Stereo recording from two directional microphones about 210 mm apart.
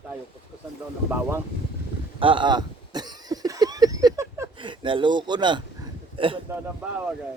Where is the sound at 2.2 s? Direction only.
25° right (ahead or behind).